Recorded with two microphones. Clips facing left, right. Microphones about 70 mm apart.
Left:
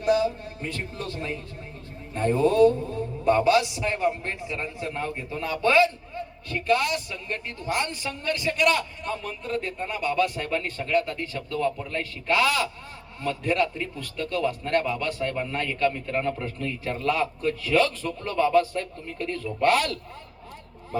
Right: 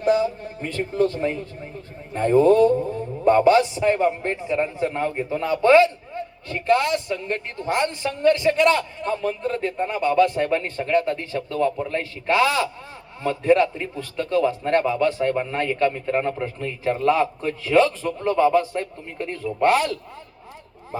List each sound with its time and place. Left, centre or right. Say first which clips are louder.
0.0 s a man's voice: right 3 dB; right